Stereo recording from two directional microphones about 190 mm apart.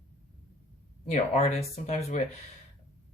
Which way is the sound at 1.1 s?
35° left (ahead or behind).